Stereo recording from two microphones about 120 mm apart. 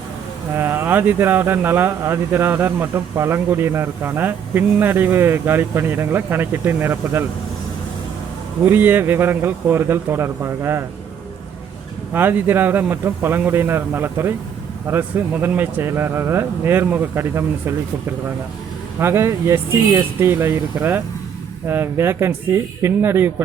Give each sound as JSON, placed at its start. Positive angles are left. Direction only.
{"t": 0.5, "sound": "speech", "side_deg": -20}
{"t": 8.6, "sound": "speech", "side_deg": -15}
{"t": 12.1, "sound": "a man's voice", "side_deg": -15}
{"t": 18.9, "sound": "speech", "side_deg": -20}